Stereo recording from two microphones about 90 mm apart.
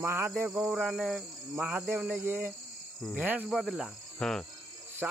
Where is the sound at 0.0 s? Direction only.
25° right (ahead or behind).